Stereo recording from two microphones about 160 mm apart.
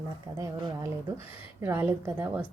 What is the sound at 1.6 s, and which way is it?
Speech, 15° right (ahead or behind).